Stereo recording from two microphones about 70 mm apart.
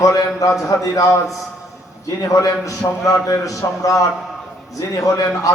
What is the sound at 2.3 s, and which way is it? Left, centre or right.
A man's voice, left.